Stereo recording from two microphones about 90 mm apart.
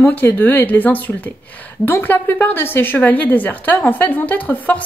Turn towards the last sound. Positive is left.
turn(degrees=20)  # may be behind; listen again after turning